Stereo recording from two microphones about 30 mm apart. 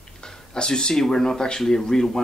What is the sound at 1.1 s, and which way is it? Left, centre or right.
Speech, left.